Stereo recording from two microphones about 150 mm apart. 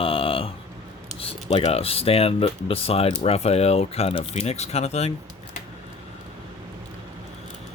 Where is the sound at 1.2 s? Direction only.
45° left (ahead or behind).